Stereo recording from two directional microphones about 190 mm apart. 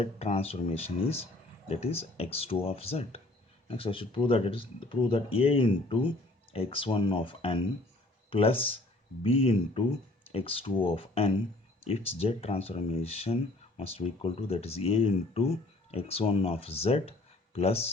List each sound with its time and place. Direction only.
0.0 s speech: 30° left (ahead or behind)